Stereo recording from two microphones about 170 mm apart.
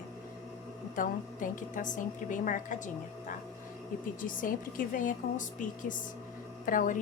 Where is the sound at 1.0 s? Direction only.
50° left (ahead or behind).